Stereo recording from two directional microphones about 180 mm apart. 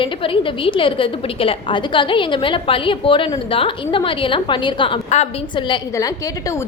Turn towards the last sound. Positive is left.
turn(degrees=25)  # may be behind; listen again after turning